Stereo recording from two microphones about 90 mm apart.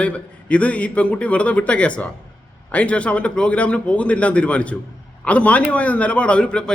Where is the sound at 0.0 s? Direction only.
15° left (ahead or behind).